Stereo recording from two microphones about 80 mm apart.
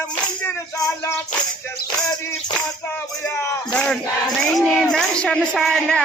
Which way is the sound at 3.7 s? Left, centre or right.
Centre.